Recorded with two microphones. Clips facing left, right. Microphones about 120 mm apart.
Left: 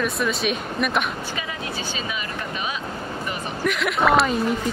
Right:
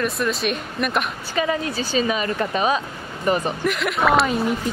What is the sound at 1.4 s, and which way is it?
Speech, 45° right (ahead or behind).